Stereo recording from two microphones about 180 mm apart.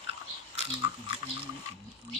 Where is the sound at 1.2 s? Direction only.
30° right (ahead or behind).